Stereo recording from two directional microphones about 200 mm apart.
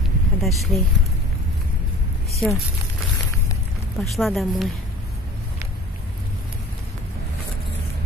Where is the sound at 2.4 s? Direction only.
5° left (ahead or behind).